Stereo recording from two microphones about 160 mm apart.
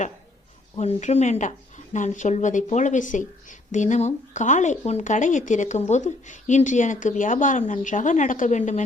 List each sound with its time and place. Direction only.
0.8 s a woman's voice: 45° left (ahead or behind)